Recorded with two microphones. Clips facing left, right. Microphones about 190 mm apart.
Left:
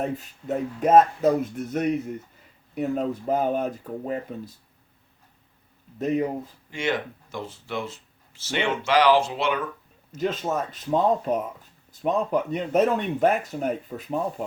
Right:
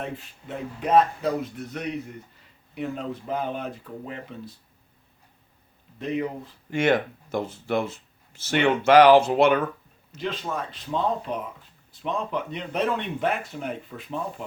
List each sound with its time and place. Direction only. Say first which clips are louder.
0.0 s speech: left 5 dB; 40° left (ahead or behind)
6.0 s speech: left 4 dB; 45° left (ahead or behind)
6.7 s speech: right 6 dB; 55° right (ahead or behind)
10.2 s speech: left 4 dB; 45° left (ahead or behind)